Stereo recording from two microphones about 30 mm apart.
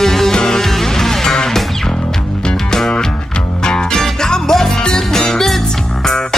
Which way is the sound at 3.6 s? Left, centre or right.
Left.